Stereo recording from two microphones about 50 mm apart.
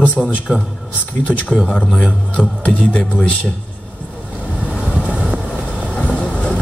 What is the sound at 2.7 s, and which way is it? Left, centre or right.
Speech, left.